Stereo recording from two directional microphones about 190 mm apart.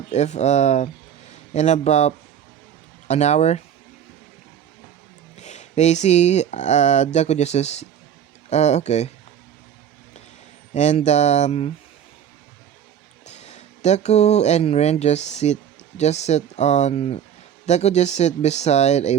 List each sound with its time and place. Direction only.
0.1 s a man's voice: 35° left (ahead or behind)
5.4 s speech: 35° left (ahead or behind)
10.8 s speech: 35° left (ahead or behind)
13.2 s speech: 35° left (ahead or behind)